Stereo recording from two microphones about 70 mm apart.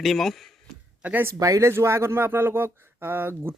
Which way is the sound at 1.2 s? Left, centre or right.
Right.